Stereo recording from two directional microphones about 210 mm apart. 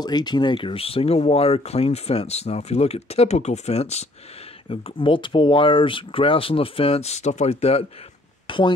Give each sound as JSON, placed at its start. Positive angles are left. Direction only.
{"t": 0.0, "sound": "speech", "side_deg": 20}